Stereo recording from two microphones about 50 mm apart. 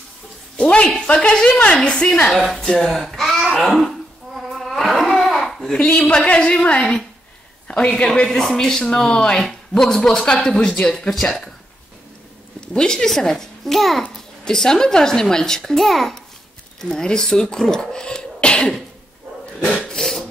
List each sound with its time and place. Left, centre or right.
0.6 s a woman's voice: centre
2.3 s speech: centre
4.6 s a sound: centre
5.8 s speech: left
6.0 s a woman's voice: left
7.6 s a sound: left
7.9 s speech: centre
10.9 s speech: centre
12.5 s a child's voice: centre
16.9 s speech: centre
19.9 s filing: centre